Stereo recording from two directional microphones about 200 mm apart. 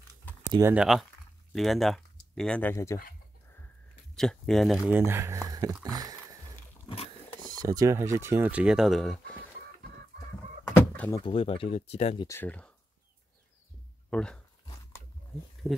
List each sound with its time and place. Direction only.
0.5 s speech: 15° right (ahead or behind)
0.7 s speech: centre (ahead or behind); by 3.0 s 15° left (ahead or behind)
4.1 s speech: centre (ahead or behind); by 5.8 s 15° right (ahead or behind)
5.9 s a sound: 20° right (ahead or behind)
7.5 s speech: 15° right (ahead or behind); by 9.2 s centre (ahead or behind)
11.1 s speech: 25° left (ahead or behind)
12.3 s speech: 10° left (ahead or behind)
14.1 s speech: 5° left (ahead or behind)